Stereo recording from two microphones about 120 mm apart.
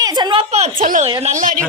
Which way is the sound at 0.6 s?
75° right (ahead or behind).